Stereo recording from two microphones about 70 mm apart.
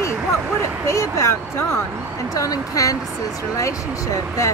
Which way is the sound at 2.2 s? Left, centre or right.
Left.